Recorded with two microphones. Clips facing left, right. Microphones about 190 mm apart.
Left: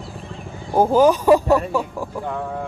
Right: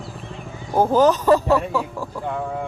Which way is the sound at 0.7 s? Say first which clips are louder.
Left 1 dB; 10° left (ahead or behind).